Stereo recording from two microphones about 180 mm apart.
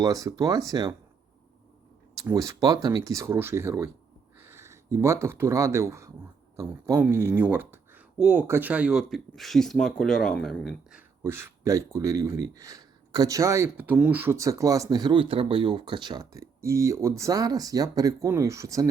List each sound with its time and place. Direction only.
0.0 s speech: 20° right (ahead or behind)
2.1 s speech: 20° right (ahead or behind); by 10.8 s 5° left (ahead or behind)
10.9 s speech: 15° right (ahead or behind)